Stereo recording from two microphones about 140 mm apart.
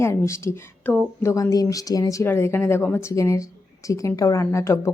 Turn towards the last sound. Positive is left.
turn(degrees=20)  # may be behind; listen again after turning